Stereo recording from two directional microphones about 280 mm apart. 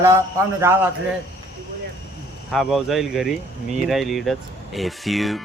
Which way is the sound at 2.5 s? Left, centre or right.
Centre.